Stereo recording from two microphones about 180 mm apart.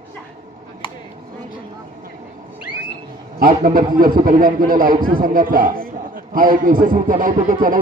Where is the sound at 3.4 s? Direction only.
50° right (ahead or behind).